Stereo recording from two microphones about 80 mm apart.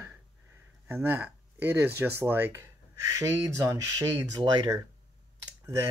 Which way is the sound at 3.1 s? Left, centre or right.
Right.